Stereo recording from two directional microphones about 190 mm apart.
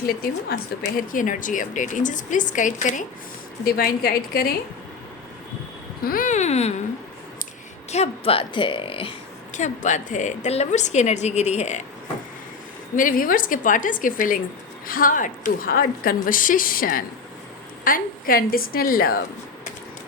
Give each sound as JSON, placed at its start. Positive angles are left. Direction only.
{"t": 0.8, "sound": "speech", "side_deg": 45}
{"t": 6.0, "sound": "a woman's voice", "side_deg": 50}
{"t": 7.9, "sound": "a woman's voice", "side_deg": 35}
{"t": 9.6, "sound": "a woman's voice", "side_deg": 40}
{"t": 13.0, "sound": "speech", "side_deg": 45}